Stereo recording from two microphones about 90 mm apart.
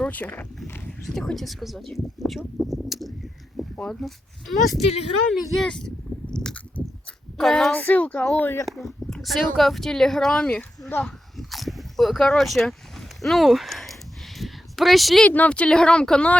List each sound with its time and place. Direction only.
0.1 s speech: 20° left (ahead or behind)
0.9 s speech: 5° left (ahead or behind)
6.3 s chewing: 10° left (ahead or behind)
7.3 s speech: 5° left (ahead or behind)
7.7 s speech: 20° left (ahead or behind)
8.6 s speech: centre (ahead or behind); by 11.0 s 15° left (ahead or behind)
11.0 s biting: centre (ahead or behind)
14.3 s a sound: centre (ahead or behind)
15.2 s speech: 15° left (ahead or behind)